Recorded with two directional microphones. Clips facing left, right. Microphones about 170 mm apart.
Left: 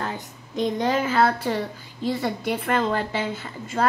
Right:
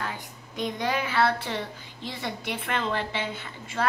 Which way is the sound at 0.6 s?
45° left (ahead or behind).